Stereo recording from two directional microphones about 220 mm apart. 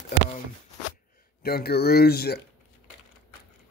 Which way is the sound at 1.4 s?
45° left (ahead or behind).